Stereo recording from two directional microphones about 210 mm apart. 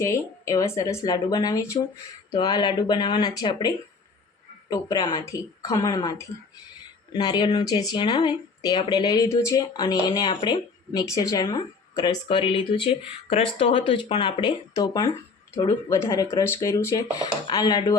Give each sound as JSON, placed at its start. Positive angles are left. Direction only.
{"t": 0.0, "sound": "speech", "side_deg": 15}